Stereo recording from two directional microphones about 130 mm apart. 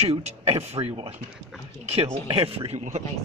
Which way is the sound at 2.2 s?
45° right (ahead or behind).